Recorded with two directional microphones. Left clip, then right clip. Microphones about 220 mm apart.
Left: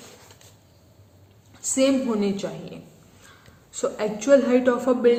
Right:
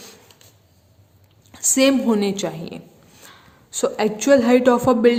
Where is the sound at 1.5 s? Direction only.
50° right (ahead or behind).